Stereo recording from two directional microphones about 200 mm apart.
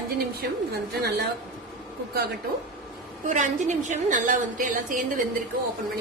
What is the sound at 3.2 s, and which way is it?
A woman's voice, 40° right (ahead or behind).